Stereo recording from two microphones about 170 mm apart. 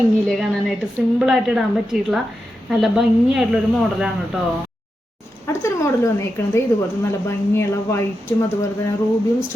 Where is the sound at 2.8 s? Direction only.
5° right (ahead or behind).